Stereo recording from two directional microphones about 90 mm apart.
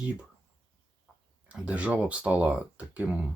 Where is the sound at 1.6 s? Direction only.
15° right (ahead or behind).